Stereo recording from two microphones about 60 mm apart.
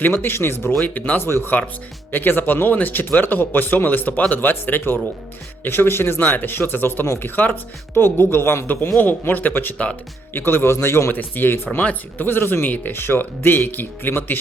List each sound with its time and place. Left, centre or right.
0.0 s speech: left
0.9 s speech: left
1.2 s speech: left
9.7 s speech: left
10.3 s speech: left
11.1 s speech: left
12.6 s speech: left
12.9 s speech: left